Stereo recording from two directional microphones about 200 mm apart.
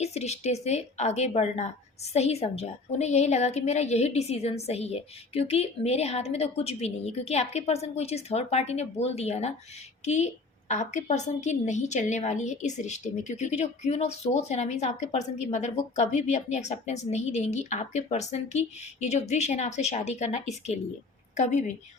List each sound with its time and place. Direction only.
0.0 s a woman's voice: 35° left (ahead or behind)